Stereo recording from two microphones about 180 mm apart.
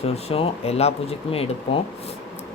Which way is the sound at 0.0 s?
35° left (ahead or behind).